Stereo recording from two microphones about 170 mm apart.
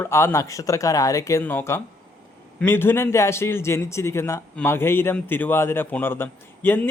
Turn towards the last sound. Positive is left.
turn(degrees=10)  # may be behind; listen again after turning